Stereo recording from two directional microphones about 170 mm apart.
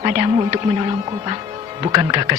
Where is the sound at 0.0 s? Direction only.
30° right (ahead or behind).